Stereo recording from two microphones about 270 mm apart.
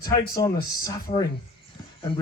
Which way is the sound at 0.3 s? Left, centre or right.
Centre.